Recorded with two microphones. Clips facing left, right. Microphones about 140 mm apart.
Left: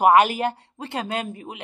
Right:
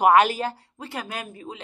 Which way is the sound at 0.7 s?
25° left (ahead or behind).